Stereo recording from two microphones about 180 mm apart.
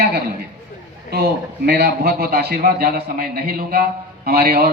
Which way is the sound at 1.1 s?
60° right (ahead or behind).